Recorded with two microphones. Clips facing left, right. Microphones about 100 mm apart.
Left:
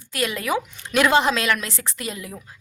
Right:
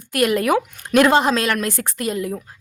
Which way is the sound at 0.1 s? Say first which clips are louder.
Right 7 dB; 50° right (ahead or behind).